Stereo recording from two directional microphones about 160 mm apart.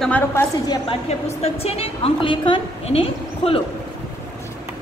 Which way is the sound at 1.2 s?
40° left (ahead or behind).